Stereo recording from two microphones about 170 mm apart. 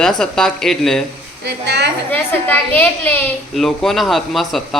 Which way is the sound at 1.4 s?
80° right.